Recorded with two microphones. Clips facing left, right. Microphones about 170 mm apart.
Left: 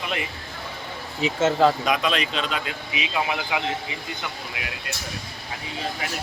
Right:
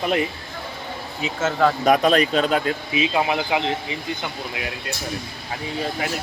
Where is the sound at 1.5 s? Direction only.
25° left (ahead or behind).